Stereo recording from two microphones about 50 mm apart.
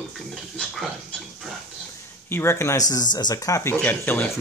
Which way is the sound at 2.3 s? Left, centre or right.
Left.